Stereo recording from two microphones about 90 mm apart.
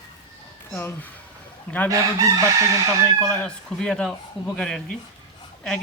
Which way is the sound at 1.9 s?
40° right (ahead or behind).